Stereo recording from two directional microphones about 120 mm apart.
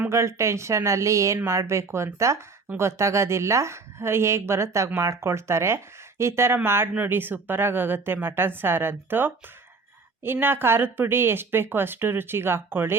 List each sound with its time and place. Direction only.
0.1 s speech: 25° right (ahead or behind)
10.3 s speech: 15° right (ahead or behind)